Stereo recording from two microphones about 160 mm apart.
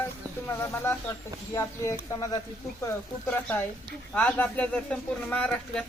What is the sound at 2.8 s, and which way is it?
Speech, 10° left (ahead or behind).